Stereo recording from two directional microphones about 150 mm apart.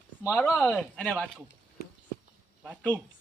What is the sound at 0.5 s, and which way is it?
Speech, 5° left (ahead or behind).